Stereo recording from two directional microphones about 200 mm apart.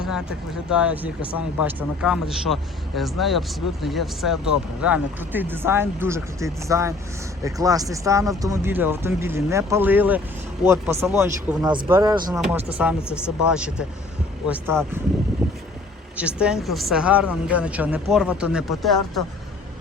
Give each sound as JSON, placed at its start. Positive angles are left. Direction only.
{"t": 0.7, "sound": "speech", "side_deg": -5}
{"t": 12.3, "sound": "speech", "side_deg": -5}